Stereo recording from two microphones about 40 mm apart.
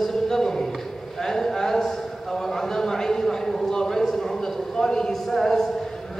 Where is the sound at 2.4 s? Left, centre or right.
Centre.